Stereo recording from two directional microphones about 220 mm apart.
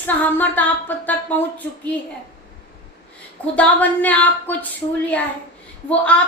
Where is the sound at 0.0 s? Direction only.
10° left (ahead or behind).